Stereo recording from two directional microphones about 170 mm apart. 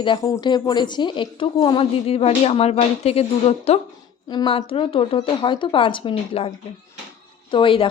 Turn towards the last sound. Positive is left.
turn(degrees=30)  # may be behind; listen again after turning